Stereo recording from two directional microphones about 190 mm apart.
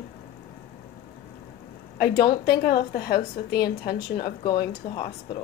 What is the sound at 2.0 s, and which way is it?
A woman's voice, 55° left (ahead or behind).